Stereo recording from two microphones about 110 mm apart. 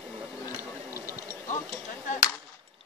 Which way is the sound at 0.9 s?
20° right (ahead or behind).